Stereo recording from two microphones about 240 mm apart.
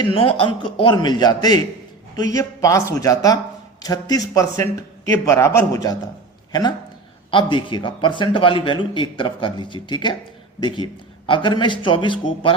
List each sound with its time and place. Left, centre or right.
0.0 s a man's voice: left